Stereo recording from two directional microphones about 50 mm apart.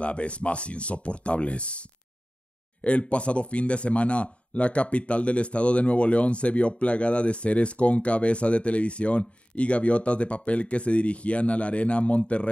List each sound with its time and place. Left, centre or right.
0.0 s a man's voice: left